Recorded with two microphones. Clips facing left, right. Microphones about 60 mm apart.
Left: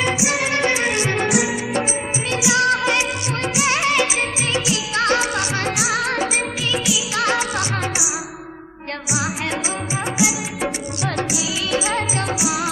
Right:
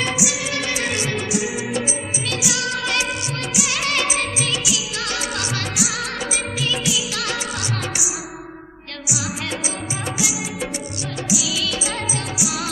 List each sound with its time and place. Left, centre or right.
0.1 s music: left
2.2 s music of bollywood: left
3.8 s music of bollywood: left
5.3 s music of bollywood: left
6.6 s music of bollywood: left
7.2 s music: left
11.1 s music: left